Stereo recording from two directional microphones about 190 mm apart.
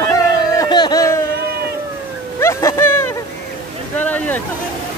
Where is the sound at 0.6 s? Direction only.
20° left (ahead or behind).